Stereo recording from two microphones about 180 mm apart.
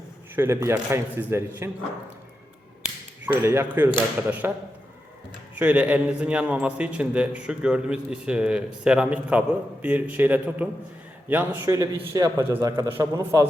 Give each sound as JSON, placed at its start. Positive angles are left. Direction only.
{"t": 0.3, "sound": "a man's voice", "side_deg": -15}
{"t": 3.4, "sound": "a man's voice", "side_deg": -10}
{"t": 5.5, "sound": "a man's voice", "side_deg": -10}